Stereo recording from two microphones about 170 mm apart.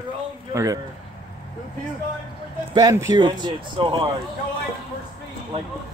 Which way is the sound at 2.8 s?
25° right (ahead or behind).